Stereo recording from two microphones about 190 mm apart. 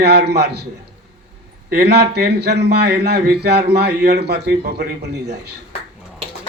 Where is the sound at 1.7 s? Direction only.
60° right (ahead or behind).